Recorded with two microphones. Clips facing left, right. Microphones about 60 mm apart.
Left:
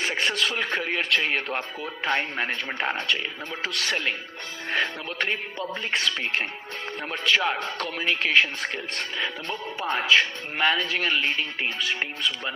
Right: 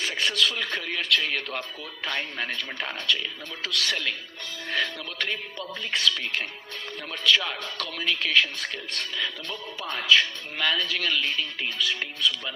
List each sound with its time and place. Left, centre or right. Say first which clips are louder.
0.0 s speech: left 1 dB; left